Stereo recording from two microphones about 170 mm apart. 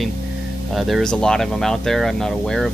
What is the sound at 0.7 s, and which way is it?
Speech, centre (ahead or behind).